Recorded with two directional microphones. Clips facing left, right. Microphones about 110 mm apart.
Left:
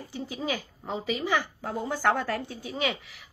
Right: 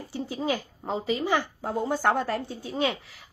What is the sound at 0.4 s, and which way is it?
A woman's voice, 25° right (ahead or behind).